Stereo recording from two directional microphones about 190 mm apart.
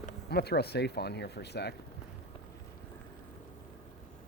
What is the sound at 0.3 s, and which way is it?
Speech, 55° left (ahead or behind).